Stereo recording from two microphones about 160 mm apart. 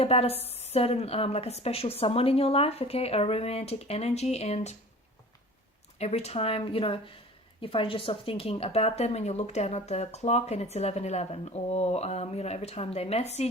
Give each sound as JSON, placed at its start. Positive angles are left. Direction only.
{"t": 0.0, "sound": "a woman's voice", "side_deg": 40}
{"t": 6.0, "sound": "a woman's voice", "side_deg": 40}